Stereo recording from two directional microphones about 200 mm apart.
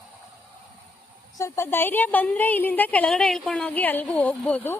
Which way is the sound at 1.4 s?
10° left (ahead or behind).